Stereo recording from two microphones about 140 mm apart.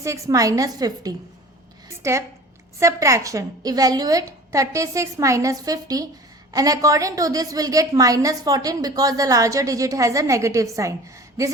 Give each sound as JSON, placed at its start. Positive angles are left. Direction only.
{"t": 0.0, "sound": "a woman's voice", "side_deg": -25}